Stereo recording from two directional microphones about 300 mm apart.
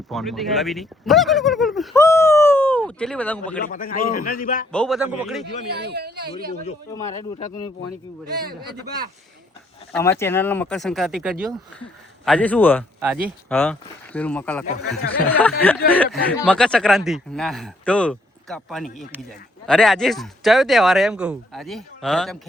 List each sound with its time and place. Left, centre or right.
0.1 s speech: centre
3.6 s a man's voice: left
4.7 s speech: centre
5.7 s speech: right
9.9 s speech: centre
13.0 s speech: centre
13.5 s speech: centre
14.7 s speech: left
15.3 s speech: centre